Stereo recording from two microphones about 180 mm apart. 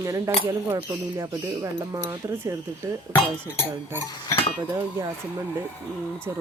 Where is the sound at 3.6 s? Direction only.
15° left (ahead or behind).